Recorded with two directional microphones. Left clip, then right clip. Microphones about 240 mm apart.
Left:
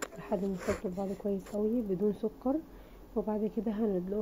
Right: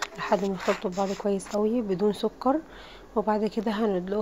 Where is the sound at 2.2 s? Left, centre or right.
Centre.